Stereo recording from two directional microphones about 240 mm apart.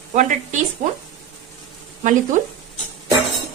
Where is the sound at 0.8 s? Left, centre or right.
Right.